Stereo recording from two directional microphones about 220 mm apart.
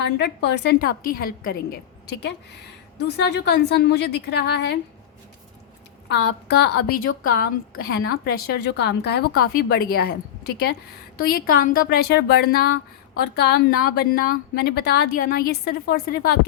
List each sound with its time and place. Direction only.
0.2 s a woman's voice: 50° left (ahead or behind)
6.1 s a woman's voice: 50° left (ahead or behind)